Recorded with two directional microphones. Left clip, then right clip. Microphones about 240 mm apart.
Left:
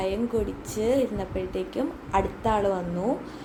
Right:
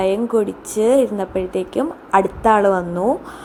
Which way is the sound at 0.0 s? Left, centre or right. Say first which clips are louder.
Right 10 dB; right.